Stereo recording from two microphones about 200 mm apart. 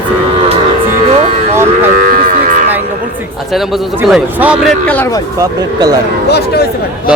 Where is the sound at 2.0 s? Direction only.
45° right (ahead or behind).